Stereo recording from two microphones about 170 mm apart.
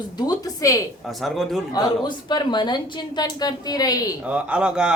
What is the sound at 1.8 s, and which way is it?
A woman's voice, 25° left (ahead or behind).